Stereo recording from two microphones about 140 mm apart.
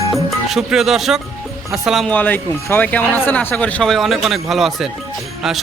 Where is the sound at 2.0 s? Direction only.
10° left (ahead or behind).